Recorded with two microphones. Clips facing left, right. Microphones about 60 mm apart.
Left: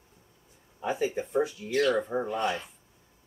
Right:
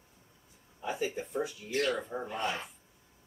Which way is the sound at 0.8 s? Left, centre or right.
Left.